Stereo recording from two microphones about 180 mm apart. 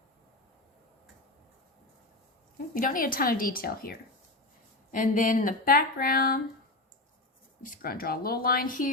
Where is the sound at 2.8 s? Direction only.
50° left (ahead or behind).